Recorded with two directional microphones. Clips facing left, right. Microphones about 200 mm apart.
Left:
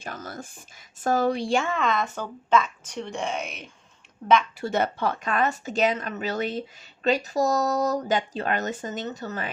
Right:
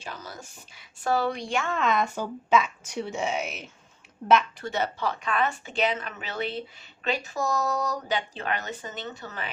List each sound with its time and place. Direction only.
0.0 s speech: 50° left (ahead or behind)
1.4 s speech: 30° left (ahead or behind)
1.7 s speech: 5° right (ahead or behind)
4.7 s speech: 55° left (ahead or behind)